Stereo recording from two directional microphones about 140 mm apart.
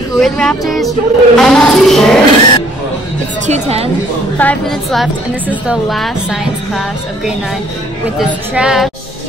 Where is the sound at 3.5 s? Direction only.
50° right (ahead or behind).